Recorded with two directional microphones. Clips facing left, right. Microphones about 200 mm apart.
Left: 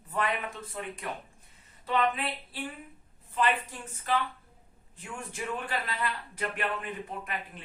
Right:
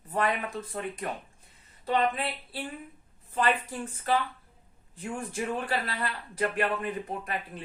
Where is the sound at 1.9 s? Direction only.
35° right (ahead or behind).